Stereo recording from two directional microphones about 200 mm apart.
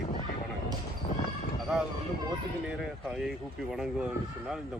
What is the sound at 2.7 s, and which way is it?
Speech, 5° right (ahead or behind).